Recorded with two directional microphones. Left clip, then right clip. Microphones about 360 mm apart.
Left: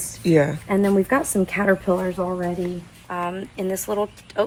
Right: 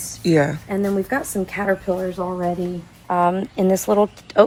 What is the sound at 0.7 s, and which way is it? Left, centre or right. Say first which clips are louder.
Speech: left 2 dB; centre.